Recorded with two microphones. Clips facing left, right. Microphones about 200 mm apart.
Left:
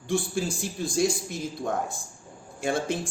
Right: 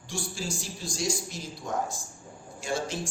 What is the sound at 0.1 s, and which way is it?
A man's voice, 55° left (ahead or behind).